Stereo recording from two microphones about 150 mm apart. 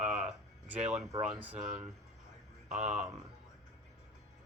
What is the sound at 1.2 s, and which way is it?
Speech, 10° right (ahead or behind).